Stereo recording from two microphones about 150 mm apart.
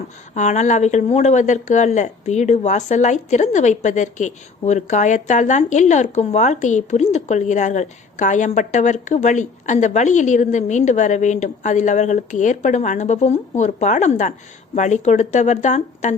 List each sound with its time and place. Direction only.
0.3 s speech: 50° left (ahead or behind)